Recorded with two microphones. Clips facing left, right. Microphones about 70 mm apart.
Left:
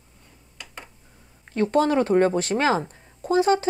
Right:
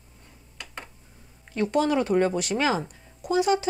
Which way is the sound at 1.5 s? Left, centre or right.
Left.